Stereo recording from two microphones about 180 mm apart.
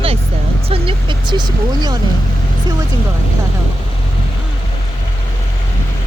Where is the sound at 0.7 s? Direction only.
30° right (ahead or behind).